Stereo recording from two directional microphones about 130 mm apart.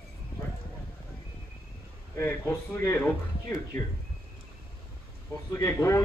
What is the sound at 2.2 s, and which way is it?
Speech, 15° left (ahead or behind).